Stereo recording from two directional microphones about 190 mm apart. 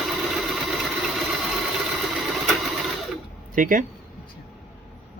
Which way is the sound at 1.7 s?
Centre (ahead or behind).